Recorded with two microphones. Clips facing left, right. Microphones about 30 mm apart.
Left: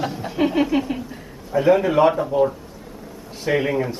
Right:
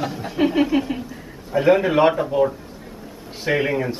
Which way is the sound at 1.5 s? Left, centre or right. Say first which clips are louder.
Even; right.